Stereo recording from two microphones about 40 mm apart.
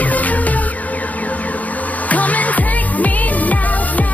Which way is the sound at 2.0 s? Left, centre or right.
Left.